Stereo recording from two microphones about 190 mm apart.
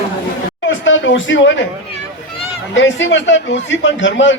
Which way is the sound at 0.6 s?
85° left.